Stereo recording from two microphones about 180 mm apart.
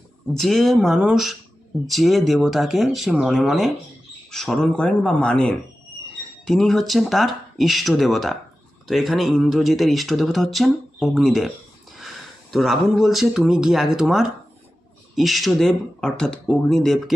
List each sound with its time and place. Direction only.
0.3 s speech: centre (ahead or behind)